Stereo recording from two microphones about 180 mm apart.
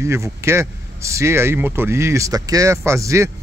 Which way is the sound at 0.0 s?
15° right (ahead or behind).